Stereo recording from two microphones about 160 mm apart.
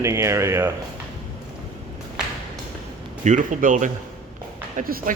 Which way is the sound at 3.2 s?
50° right (ahead or behind).